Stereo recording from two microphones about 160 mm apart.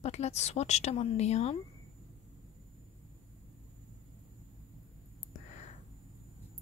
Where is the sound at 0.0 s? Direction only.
45° left (ahead or behind).